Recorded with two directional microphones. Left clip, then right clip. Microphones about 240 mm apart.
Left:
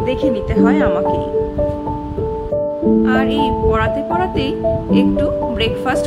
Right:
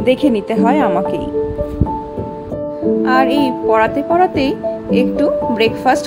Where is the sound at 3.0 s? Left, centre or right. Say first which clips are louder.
Right 3 dB; centre.